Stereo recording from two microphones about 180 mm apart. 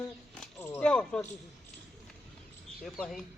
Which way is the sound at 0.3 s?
10° left (ahead or behind).